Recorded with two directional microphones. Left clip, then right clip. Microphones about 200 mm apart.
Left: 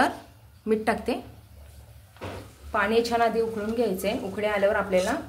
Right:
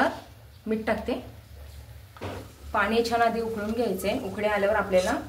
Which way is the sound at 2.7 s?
55° left (ahead or behind).